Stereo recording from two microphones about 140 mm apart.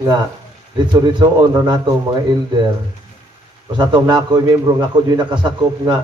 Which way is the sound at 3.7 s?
30° right (ahead or behind).